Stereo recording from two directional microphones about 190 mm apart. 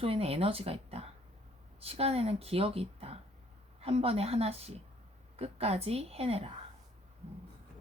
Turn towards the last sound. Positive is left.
turn(degrees=-30)  # may be behind; listen again after turning